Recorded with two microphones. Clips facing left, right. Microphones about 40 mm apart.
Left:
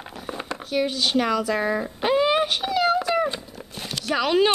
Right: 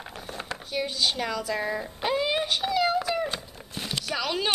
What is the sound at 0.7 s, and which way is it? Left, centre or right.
Speech, centre.